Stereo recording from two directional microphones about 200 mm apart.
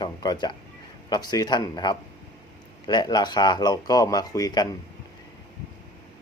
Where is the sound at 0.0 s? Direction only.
20° left (ahead or behind).